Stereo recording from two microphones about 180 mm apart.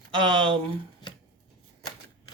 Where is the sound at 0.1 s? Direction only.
25° right (ahead or behind).